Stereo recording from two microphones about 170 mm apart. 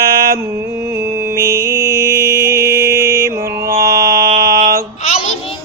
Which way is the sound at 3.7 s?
60° right (ahead or behind).